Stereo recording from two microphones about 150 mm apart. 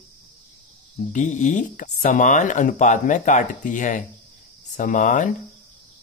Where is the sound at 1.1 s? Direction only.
55° left (ahead or behind).